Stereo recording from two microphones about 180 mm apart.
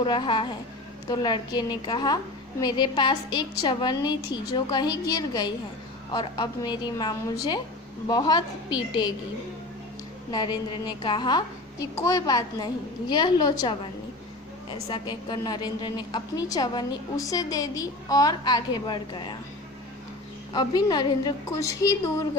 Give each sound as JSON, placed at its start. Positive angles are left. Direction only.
{"t": 0.0, "sound": "a woman's voice", "side_deg": 25}
{"t": 10.3, "sound": "a woman's voice", "side_deg": 25}
{"t": 14.8, "sound": "a woman's voice", "side_deg": 25}
{"t": 20.5, "sound": "a woman's voice", "side_deg": 20}